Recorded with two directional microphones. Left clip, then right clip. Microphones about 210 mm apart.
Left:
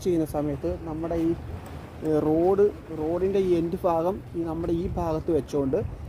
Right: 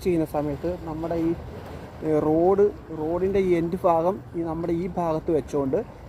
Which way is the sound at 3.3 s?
50° left (ahead or behind).